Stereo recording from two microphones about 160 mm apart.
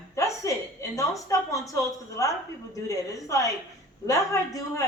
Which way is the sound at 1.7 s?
20° left (ahead or behind).